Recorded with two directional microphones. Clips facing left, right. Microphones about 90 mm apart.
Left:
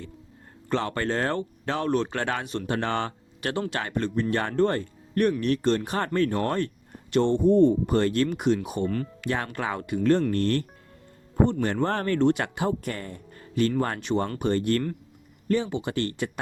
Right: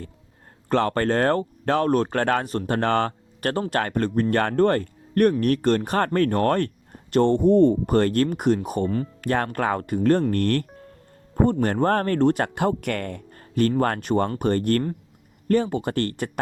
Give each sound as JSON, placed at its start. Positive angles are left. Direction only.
{"t": 0.7, "sound": "speech", "side_deg": -50}
{"t": 13.4, "sound": "speech", "side_deg": -45}